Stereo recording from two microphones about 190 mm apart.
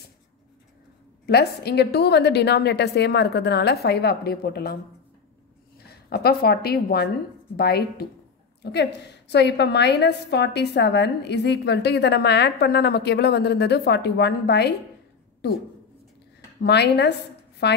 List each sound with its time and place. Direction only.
1.2 s a woman's voice: 55° left (ahead or behind)
5.9 s a woman's voice: 55° left (ahead or behind)
16.6 s a woman's voice: 60° left (ahead or behind)